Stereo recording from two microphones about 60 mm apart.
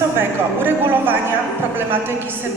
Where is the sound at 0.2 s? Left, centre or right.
Right.